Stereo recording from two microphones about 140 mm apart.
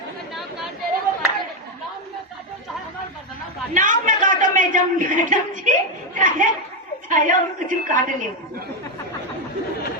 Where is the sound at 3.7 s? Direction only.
65° right (ahead or behind).